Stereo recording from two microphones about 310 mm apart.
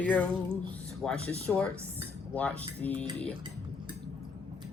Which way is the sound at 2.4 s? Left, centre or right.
Centre.